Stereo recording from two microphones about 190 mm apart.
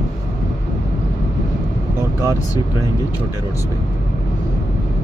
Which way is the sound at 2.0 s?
15° right (ahead or behind).